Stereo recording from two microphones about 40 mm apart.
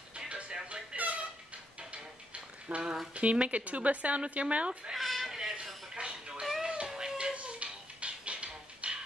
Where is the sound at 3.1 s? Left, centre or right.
Right.